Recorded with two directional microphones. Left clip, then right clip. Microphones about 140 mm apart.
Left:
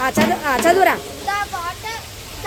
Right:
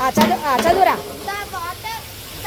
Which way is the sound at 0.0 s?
25° left (ahead or behind).